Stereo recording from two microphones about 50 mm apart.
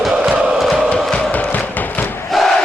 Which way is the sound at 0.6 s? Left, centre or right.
Centre.